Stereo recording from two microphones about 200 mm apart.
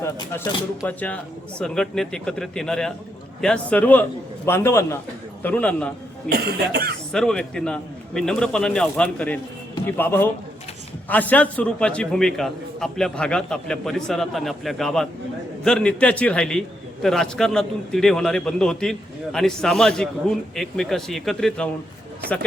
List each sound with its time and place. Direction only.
0.9 s a man's voice: 5° left (ahead or behind)
6.2 s cough: 50° right (ahead or behind)
7.1 s a man's voice: 5° left (ahead or behind)